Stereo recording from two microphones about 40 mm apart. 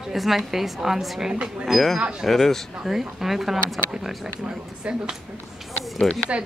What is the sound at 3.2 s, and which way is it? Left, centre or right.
Speech, centre.